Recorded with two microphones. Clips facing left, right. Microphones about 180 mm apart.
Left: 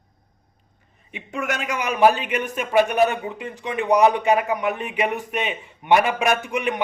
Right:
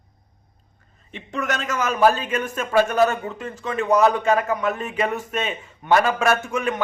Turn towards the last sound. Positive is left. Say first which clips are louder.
# right 1 dB
turn(degrees=15)  # may be behind; listen again after turning